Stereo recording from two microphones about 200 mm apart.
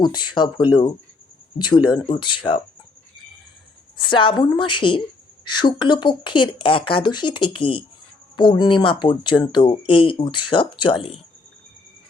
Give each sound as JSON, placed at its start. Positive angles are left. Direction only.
{"t": 0.0, "sound": "speech", "side_deg": 20}
{"t": 3.9, "sound": "speech", "side_deg": 25}